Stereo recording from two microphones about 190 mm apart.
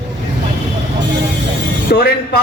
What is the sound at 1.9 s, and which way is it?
Speech, 50° left (ahead or behind).